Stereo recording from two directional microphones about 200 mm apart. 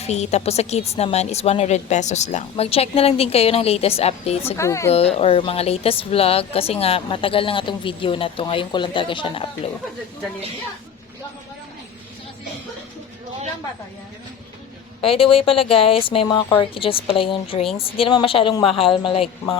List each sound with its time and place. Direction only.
0.0 s a woman's voice: 35° left (ahead or behind)
4.5 s speech: 15° left (ahead or behind)
4.9 s speech: 30° left (ahead or behind)
15.0 s speech: 25° left (ahead or behind)